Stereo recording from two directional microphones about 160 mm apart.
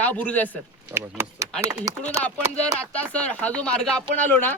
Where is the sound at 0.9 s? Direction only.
15° right (ahead or behind).